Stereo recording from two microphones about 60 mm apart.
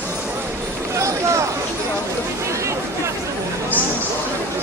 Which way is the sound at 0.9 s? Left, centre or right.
Right.